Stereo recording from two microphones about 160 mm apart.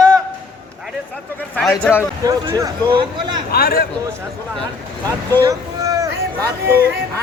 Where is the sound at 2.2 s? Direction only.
20° right (ahead or behind).